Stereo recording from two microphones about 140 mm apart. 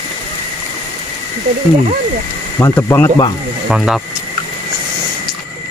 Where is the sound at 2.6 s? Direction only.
15° left (ahead or behind).